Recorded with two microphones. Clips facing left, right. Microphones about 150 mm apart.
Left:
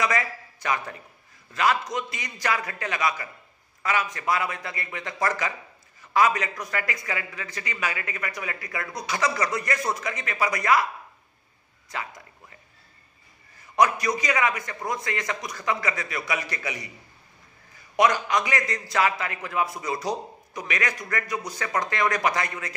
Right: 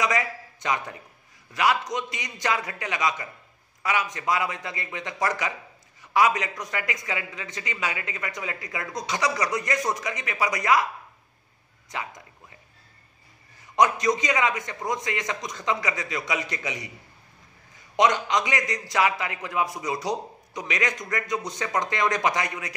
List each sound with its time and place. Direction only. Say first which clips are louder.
0.0 s a man's voice: even; 15° right (ahead or behind)
11.9 s speech: even; 20° right (ahead or behind)
13.7 s a man's voice: right 1 dB; 20° right (ahead or behind)
17.9 s a man's voice: even; 20° right (ahead or behind)